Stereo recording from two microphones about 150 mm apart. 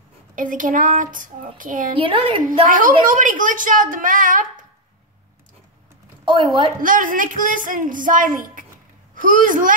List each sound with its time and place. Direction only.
0.4 s speech: 60° right (ahead or behind)
2.0 s a woman's voice: 35° right (ahead or behind)
2.7 s speech: 65° right (ahead or behind)
6.2 s a woman's voice: 30° right (ahead or behind)
6.8 s speech: 65° right (ahead or behind)